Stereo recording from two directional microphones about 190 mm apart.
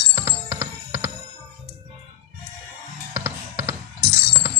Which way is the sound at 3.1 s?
15° right (ahead or behind).